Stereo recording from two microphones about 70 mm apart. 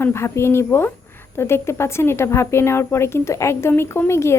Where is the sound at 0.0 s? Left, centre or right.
Left.